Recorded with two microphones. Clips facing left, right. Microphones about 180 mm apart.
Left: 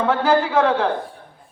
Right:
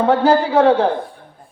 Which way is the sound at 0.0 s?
35° right (ahead or behind).